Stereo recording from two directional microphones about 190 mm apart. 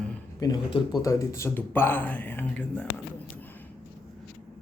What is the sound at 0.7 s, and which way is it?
Mantra, 20° left (ahead or behind).